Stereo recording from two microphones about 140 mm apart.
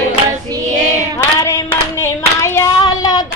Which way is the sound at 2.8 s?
30° left (ahead or behind).